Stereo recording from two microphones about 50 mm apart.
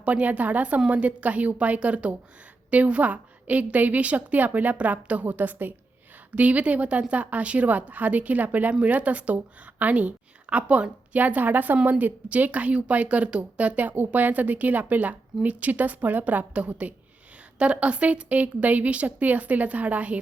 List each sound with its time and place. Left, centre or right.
0.0 s a woman's voice: right
6.3 s a woman's voice: right